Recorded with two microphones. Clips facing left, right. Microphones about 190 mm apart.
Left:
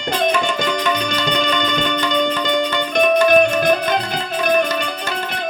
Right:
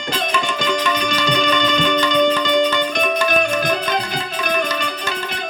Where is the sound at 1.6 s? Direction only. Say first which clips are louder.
Right 2 dB; 55° left (ahead or behind).